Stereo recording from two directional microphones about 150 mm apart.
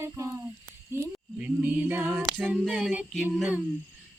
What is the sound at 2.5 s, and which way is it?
Female singing, 5° right (ahead or behind).